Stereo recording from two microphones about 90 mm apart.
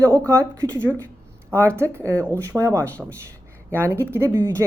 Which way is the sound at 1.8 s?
30° right (ahead or behind).